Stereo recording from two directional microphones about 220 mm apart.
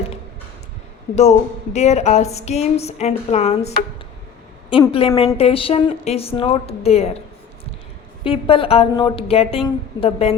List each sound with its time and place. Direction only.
1.1 s a woman's voice: 30° left (ahead or behind)
8.2 s a woman's voice: 25° left (ahead or behind)